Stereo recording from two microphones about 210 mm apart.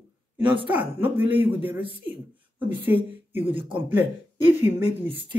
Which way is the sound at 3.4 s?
25° right (ahead or behind).